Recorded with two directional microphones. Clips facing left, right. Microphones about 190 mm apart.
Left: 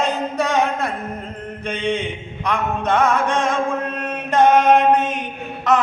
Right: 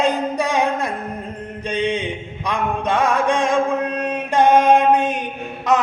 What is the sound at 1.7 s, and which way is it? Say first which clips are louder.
Mantra: right 1 dB; 15° right (ahead or behind).